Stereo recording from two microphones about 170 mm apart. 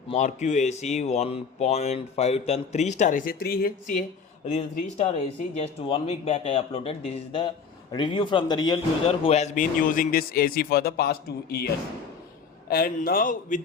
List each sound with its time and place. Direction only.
0.1 s speech: 45° left (ahead or behind)
4.4 s a man's voice: 45° left (ahead or behind)